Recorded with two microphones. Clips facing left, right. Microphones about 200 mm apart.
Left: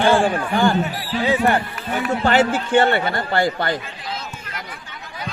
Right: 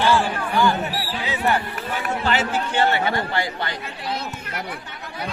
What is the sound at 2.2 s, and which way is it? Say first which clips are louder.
A man's voice: left 6 dB; 50° left (ahead or behind).